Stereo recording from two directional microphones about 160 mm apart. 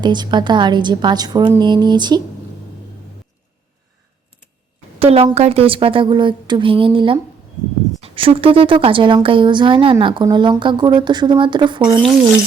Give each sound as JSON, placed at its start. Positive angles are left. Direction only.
{"t": 0.0, "sound": "a woman's voice", "side_deg": -30}
{"t": 4.9, "sound": "a woman's voice", "side_deg": -40}